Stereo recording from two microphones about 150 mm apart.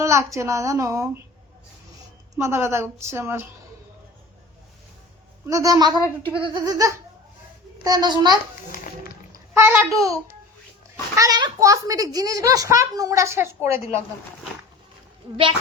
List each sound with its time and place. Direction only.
0.0 s a child's voice: 20° right (ahead or behind)
2.3 s a woman's voice: 20° right (ahead or behind)
5.5 s a child's voice: 20° right (ahead or behind)
9.6 s a woman's voice: 15° right (ahead or behind)
11.1 s a child's voice: 25° right (ahead or behind)